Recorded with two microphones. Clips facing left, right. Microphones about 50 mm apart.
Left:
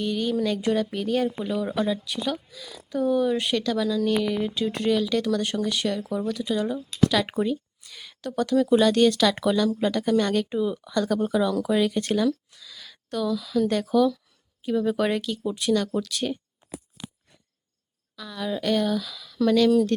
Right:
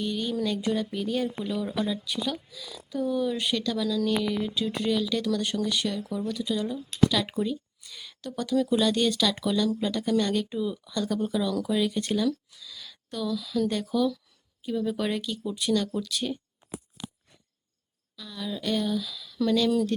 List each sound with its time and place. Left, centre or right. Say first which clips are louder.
0.0 s speech: left 4 dB; left
1.5 s speech: left 4 dB; left
3.8 s speech: left 3 dB; left
10.6 s speech: left 4 dB; left
10.9 s speech: left 5 dB; left
11.2 s speech: left 4 dB; left
11.9 s speech: left 3 dB; left
13.7 s speech: left 7 dB; left
18.2 s speech: left 5 dB; left